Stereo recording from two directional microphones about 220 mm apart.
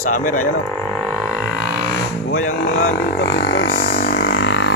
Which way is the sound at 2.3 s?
65° left (ahead or behind).